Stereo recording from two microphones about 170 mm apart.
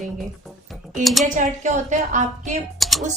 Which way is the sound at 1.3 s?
45° right (ahead or behind).